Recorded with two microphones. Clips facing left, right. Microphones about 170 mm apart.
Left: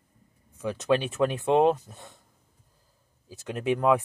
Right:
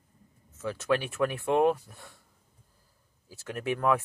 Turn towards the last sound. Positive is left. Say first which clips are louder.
# left 4 dB
turn(degrees=20)  # may be behind; listen again after turning